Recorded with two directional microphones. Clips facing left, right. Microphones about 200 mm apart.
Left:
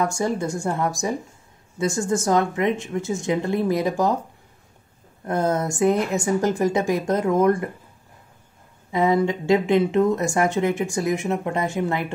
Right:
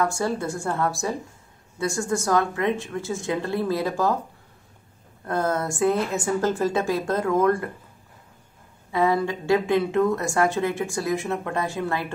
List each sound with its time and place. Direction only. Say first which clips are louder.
0.0 s a woman's voice: left 1 dB; 20° left (ahead or behind)
5.2 s a woman's voice: left 2 dB; 20° left (ahead or behind)
8.9 s a woman's voice: left 2 dB; 20° left (ahead or behind)